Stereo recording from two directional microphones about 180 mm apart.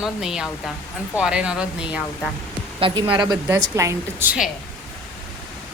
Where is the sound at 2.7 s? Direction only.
30° right (ahead or behind).